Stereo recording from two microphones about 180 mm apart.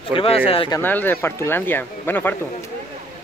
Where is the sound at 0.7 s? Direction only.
10° left (ahead or behind).